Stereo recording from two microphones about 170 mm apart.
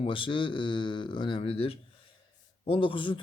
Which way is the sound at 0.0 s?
30° left (ahead or behind).